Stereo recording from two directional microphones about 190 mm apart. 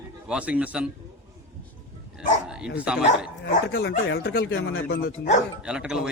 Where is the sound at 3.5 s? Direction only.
50° left (ahead or behind); by 4.8 s 90° left.